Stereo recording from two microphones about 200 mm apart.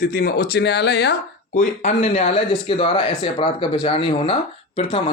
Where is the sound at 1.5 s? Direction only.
40° left (ahead or behind).